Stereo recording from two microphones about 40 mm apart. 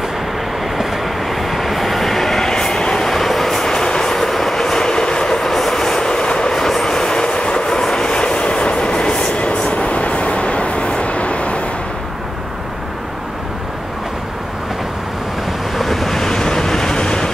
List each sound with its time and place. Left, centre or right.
0.7 s train: centre
3.1 s train: centre; by 6.5 s left
6.5 s train: centre; by 11.6 s left
15.7 s waves: centre